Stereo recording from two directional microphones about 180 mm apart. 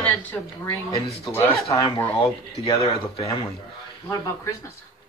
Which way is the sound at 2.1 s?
30° left (ahead or behind).